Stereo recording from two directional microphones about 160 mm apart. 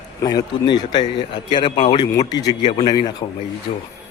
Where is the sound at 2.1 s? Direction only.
25° left (ahead or behind).